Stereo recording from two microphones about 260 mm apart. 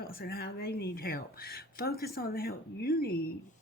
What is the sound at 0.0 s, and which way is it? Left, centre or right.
Speech, left.